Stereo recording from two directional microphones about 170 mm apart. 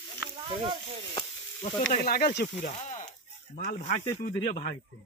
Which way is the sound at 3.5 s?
45° left (ahead or behind).